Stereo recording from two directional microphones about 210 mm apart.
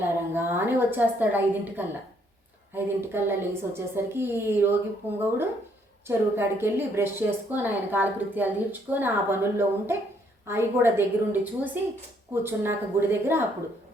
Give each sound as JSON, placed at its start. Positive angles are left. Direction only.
{"t": 0.0, "sound": "a woman's voice", "side_deg": -10}
{"t": 6.1, "sound": "a woman's voice", "side_deg": -10}